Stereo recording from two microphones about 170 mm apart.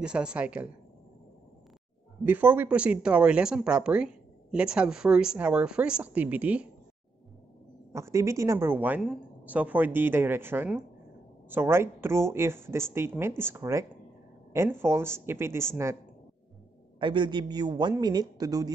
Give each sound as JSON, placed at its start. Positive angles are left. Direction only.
{"t": 0.0, "sound": "speech", "side_deg": -5}
{"t": 2.2, "sound": "speech", "side_deg": -10}
{"t": 7.9, "sound": "speech", "side_deg": -15}
{"t": 17.0, "sound": "speech", "side_deg": -25}